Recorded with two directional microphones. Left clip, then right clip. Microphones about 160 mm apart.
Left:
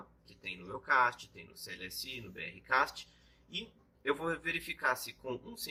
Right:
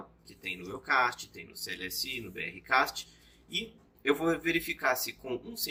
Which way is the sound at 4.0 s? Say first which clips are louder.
Right 6 dB; 30° right (ahead or behind).